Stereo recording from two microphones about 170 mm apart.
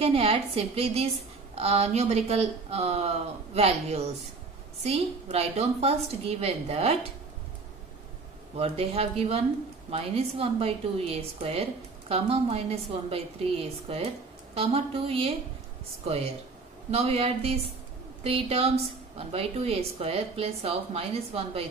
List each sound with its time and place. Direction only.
0.0 s a woman's voice: 35° right (ahead or behind)
8.5 s a woman's voice: 35° right (ahead or behind)
16.9 s a woman's voice: 35° right (ahead or behind)